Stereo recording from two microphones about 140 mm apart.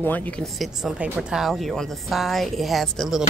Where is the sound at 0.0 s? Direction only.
10° left (ahead or behind).